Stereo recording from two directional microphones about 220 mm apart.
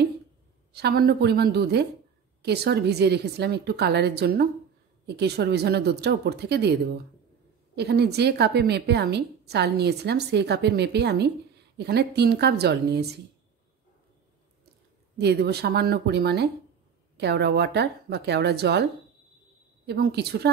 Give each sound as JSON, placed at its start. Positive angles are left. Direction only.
{"t": 0.7, "sound": "a woman's voice", "side_deg": -45}
{"t": 15.1, "sound": "a woman's voice", "side_deg": -50}
{"t": 19.9, "sound": "a woman's voice", "side_deg": -50}